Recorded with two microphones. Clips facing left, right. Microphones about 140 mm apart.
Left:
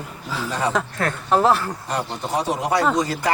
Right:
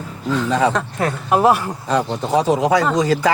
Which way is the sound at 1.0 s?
15° right (ahead or behind).